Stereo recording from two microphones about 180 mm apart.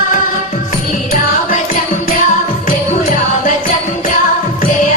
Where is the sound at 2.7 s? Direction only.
45° left (ahead or behind).